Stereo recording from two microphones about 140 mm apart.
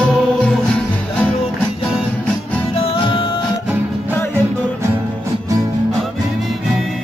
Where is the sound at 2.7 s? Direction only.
40° left (ahead or behind).